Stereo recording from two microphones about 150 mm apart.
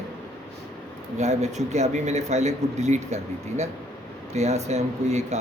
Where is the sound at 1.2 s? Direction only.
50° right (ahead or behind).